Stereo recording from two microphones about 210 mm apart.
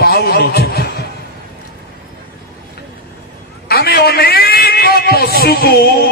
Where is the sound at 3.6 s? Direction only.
50° left (ahead or behind).